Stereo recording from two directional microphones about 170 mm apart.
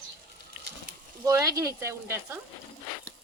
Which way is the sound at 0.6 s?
10° right (ahead or behind).